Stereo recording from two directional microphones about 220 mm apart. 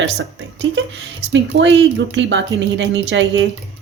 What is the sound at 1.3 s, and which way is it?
Speech, 55° right (ahead or behind).